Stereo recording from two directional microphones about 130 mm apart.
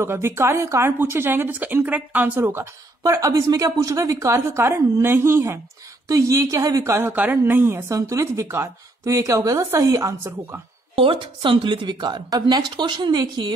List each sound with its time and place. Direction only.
0.0 s speech: 20° right (ahead or behind)
11.0 s a woman's voice: 45° right (ahead or behind)